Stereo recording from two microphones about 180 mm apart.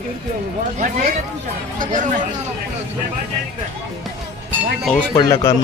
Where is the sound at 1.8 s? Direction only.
45° right (ahead or behind).